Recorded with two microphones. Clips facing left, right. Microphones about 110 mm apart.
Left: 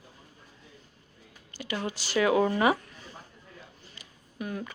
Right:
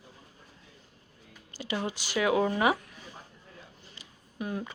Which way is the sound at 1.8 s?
15° right (ahead or behind).